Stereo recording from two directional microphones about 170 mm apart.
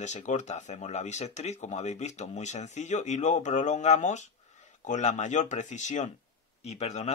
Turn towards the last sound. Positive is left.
turn(degrees=40)  # may be behind; listen again after turning